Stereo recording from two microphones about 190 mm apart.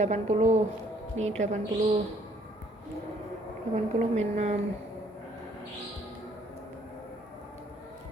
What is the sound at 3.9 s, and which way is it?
Speech, 35° right (ahead or behind).